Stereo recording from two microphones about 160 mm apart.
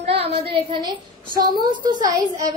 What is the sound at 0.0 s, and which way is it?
A woman's voice, 35° right (ahead or behind).